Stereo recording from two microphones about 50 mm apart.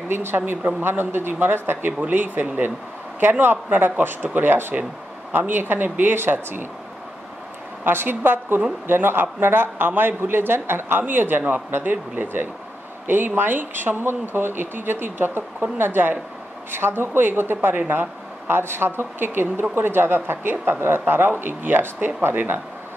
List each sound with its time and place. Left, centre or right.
0.1 s speech: right
7.8 s speech: right